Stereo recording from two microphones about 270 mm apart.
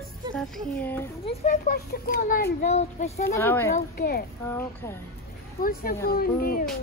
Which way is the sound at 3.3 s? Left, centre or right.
Centre.